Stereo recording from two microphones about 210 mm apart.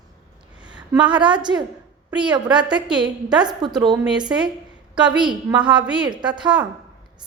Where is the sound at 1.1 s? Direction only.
20° right (ahead or behind).